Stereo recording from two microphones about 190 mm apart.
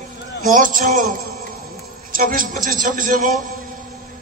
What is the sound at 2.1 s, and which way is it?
Speech, 45° right (ahead or behind).